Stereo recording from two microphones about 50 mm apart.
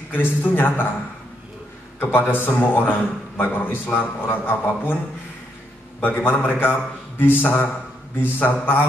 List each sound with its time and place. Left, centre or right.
0.1 s a man's voice: left
2.0 s a man's voice: left
5.9 s a man's voice: left